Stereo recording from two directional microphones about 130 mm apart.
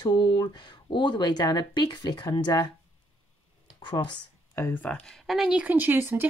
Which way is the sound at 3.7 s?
35° left (ahead or behind).